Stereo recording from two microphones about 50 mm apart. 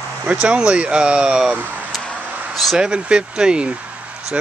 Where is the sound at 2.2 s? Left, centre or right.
Right.